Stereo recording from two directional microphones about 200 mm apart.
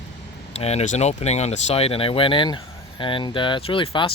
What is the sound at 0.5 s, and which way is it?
Speech, 30° left (ahead or behind).